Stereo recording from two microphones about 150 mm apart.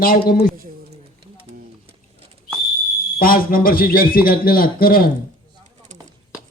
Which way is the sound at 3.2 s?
70° left (ahead or behind).